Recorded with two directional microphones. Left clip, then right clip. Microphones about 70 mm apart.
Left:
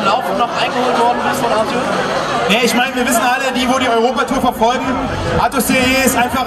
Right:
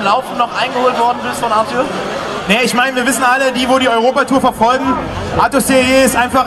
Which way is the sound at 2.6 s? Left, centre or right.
Centre.